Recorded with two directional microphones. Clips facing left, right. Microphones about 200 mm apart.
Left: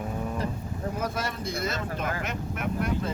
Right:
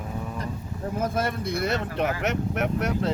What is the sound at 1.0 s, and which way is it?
Speech, 50° right (ahead or behind).